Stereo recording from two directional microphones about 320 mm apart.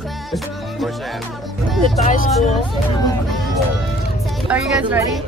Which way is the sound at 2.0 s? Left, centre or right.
Left.